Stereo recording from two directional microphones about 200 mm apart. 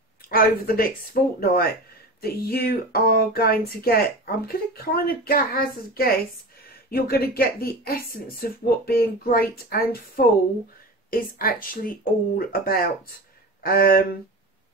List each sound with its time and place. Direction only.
0.3 s speech: 45° left (ahead or behind)